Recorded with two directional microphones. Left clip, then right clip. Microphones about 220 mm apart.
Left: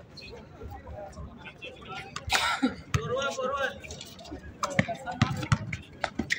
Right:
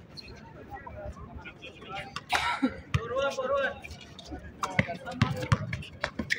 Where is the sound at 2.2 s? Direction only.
45° left (ahead or behind).